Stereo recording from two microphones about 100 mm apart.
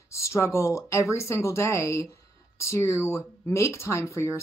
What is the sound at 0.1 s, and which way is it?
Speech, 30° left (ahead or behind).